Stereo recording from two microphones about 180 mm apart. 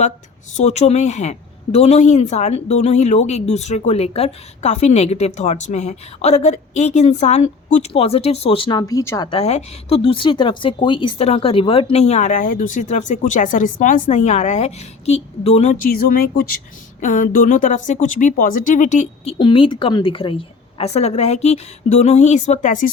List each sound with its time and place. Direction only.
0.5 s a woman's voice: 40° left (ahead or behind)
16.0 s speech: 55° left (ahead or behind)
17.0 s a woman's voice: 45° left (ahead or behind)